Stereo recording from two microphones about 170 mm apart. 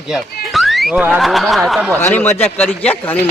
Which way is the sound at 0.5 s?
Centre (ahead or behind).